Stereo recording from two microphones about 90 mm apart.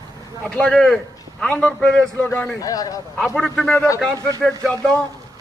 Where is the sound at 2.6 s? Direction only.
40° left (ahead or behind).